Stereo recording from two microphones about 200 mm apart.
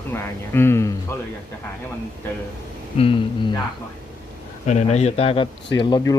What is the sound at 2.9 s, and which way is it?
Speech, 25° left (ahead or behind).